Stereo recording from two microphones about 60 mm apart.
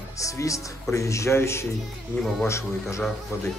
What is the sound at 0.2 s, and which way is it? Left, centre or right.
A man's voice, left.